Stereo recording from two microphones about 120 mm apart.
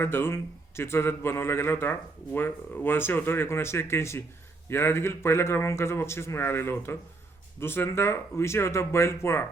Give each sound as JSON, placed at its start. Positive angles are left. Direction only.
{"t": 0.0, "sound": "a man's voice", "side_deg": 20}